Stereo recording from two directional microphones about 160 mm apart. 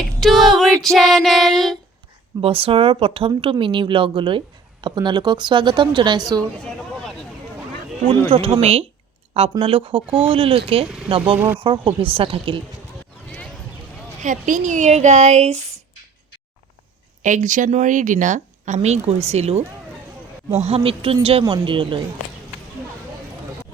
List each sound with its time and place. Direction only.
0.2 s child singing: centre (ahead or behind)
2.4 s speech: 35° right (ahead or behind)
8.3 s speech: 35° right (ahead or behind)
10.8 s speech: 5° right (ahead or behind)
11.6 s speech: 35° right (ahead or behind)
14.2 s speech: 55° right (ahead or behind)
17.2 s speech: 50° right (ahead or behind); by 22.0 s 30° right (ahead or behind)